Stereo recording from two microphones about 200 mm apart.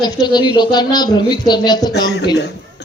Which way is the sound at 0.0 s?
20° left (ahead or behind).